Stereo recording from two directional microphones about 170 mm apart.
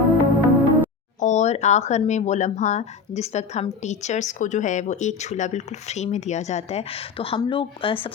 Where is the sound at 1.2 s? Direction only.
45° left (ahead or behind).